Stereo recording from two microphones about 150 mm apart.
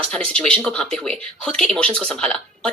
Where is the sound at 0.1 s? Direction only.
5° left (ahead or behind).